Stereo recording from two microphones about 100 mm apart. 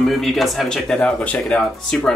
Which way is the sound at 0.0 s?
5° left (ahead or behind).